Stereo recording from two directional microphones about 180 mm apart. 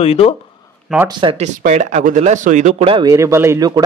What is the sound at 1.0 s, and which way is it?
Speech, 25° right (ahead or behind).